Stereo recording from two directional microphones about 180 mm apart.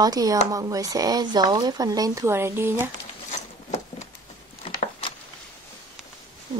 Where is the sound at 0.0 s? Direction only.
20° right (ahead or behind).